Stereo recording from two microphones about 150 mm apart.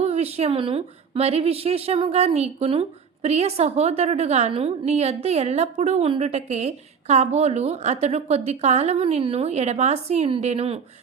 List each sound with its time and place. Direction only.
0.0 s a woman's voice: 45° right (ahead or behind)